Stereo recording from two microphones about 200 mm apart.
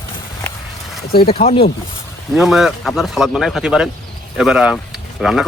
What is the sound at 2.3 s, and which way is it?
Speech, centre (ahead or behind).